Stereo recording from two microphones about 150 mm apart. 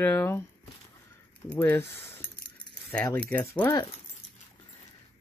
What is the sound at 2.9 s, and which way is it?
Speech, 10° left (ahead or behind).